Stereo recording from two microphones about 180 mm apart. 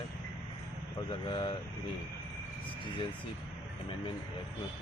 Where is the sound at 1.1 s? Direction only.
25° left (ahead or behind).